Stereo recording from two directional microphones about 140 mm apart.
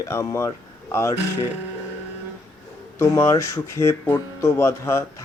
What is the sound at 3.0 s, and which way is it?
Speech, 20° left (ahead or behind).